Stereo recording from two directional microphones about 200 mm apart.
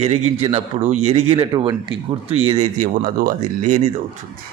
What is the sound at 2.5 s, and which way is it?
Speech, 35° right (ahead or behind).